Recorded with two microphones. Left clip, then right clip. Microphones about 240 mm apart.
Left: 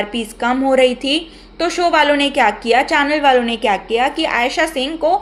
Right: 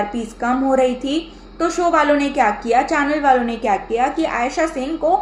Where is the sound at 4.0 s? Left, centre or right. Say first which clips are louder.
Left 2 dB; left.